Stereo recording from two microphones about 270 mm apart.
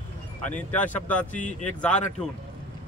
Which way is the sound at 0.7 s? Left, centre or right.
Centre.